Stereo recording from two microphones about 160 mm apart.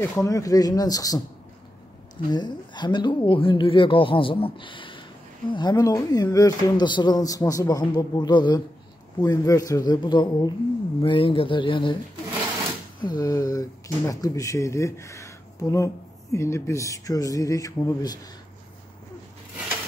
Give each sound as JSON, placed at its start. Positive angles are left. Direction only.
{"t": 0.0, "sound": "speech", "side_deg": 20}
{"t": 2.2, "sound": "speech", "side_deg": 25}
{"t": 13.0, "sound": "speech", "side_deg": 25}